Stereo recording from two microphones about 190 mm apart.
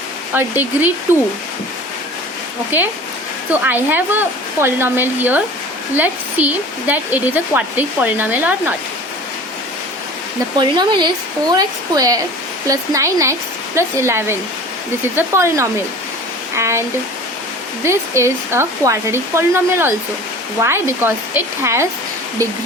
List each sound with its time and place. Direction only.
0.3 s speech: 10° right (ahead or behind)
3.5 s speech: 10° right (ahead or behind)
10.6 s speech: 25° right (ahead or behind)
17.8 s speech: 15° right (ahead or behind)